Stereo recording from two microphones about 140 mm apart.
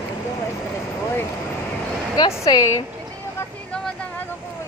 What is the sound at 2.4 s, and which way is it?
Speech, 25° left (ahead or behind).